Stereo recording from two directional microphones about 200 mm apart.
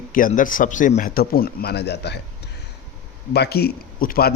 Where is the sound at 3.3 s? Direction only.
55° left (ahead or behind).